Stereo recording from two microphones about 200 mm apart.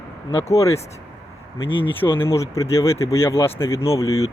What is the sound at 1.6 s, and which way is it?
Speech, 25° left (ahead or behind).